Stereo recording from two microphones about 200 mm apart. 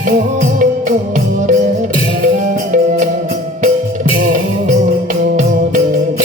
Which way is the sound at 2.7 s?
40° right (ahead or behind).